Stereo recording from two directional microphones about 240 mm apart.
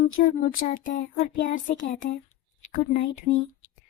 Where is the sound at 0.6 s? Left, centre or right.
Left.